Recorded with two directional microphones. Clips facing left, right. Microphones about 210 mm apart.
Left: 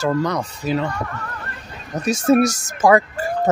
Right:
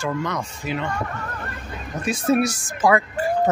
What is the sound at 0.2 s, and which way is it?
Speech, 35° left (ahead or behind).